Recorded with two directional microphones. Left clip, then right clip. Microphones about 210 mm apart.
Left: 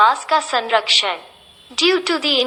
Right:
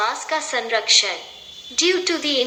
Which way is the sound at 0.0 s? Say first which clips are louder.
Left 8 dB; 25° left (ahead or behind).